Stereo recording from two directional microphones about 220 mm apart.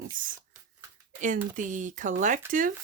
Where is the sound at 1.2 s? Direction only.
35° right (ahead or behind).